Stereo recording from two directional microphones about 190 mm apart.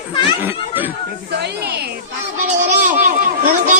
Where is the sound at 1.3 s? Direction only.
60° right (ahead or behind).